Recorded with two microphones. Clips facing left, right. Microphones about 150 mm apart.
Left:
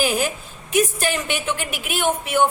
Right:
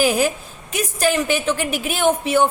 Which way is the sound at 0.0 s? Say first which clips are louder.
Right 4 dB; 35° right (ahead or behind).